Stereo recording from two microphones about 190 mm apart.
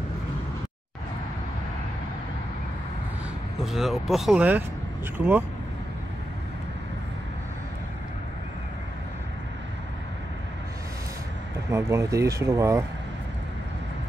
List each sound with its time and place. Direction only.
3.6 s speech: centre (ahead or behind)
11.7 s speech: 15° right (ahead or behind)